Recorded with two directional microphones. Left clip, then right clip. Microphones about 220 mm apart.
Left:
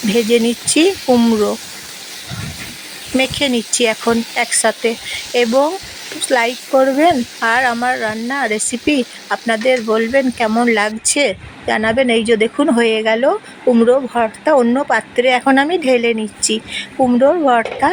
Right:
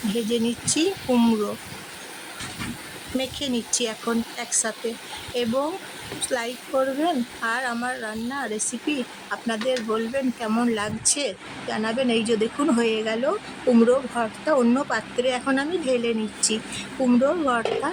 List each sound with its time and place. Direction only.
0.3 s speech: 20° left (ahead or behind)
3.2 s a woman's voice: 20° left (ahead or behind)